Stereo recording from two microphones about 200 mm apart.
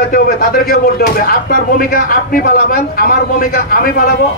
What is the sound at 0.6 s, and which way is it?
Speech, 50° left (ahead or behind).